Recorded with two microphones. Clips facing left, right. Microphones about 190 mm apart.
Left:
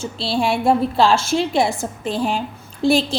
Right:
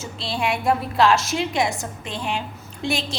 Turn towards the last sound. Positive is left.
turn(degrees=35)  # may be behind; listen again after turning